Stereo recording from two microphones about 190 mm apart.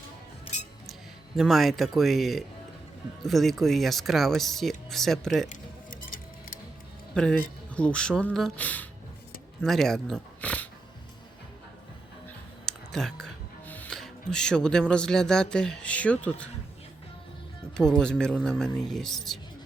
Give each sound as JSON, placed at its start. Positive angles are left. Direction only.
{"t": 1.4, "sound": "speech", "side_deg": 0}
{"t": 5.5, "sound": "music", "side_deg": 45}
{"t": 7.1, "sound": "speech", "side_deg": 5}
{"t": 12.6, "sound": "speech", "side_deg": 5}
{"t": 17.7, "sound": "speech", "side_deg": 5}